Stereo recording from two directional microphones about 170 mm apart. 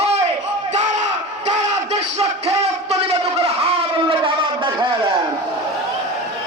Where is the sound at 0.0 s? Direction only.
35° right (ahead or behind).